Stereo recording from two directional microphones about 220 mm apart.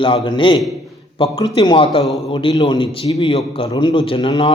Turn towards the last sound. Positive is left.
turn(degrees=25)  # may be behind; listen again after turning